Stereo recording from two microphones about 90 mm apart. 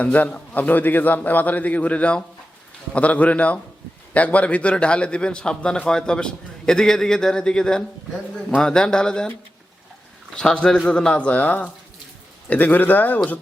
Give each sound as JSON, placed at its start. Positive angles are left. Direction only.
{"t": 0.0, "sound": "a man's voice", "side_deg": 15}
{"t": 10.3, "sound": "a man's voice", "side_deg": 10}